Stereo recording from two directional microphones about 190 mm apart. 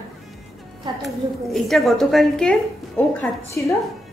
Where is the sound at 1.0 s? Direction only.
Centre (ahead or behind).